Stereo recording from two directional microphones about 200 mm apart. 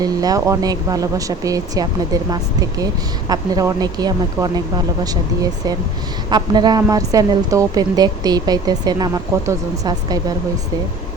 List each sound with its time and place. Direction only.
0.0 s a woman's voice: 20° right (ahead or behind)
6.3 s a woman's voice: 20° right (ahead or behind)